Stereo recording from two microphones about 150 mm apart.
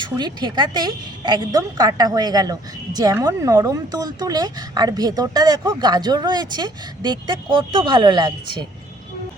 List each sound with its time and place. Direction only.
0.2 s speech: 30° right (ahead or behind)